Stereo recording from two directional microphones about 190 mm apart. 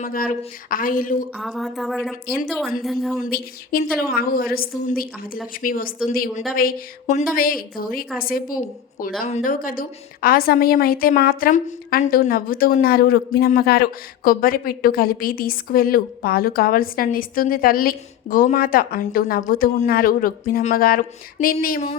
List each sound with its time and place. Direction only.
0.0 s a woman's voice: 45° left (ahead or behind)
1.4 s speech: centre (ahead or behind)
3.2 s a woman's voice: 55° left (ahead or behind)